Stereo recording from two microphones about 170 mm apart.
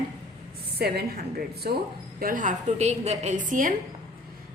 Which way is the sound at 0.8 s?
70° right (ahead or behind).